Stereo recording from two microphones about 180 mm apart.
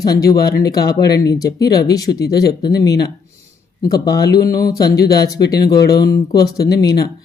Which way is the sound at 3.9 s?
20° left (ahead or behind).